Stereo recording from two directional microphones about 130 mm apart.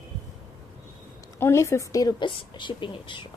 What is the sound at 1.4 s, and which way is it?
A woman's voice, 20° left (ahead or behind).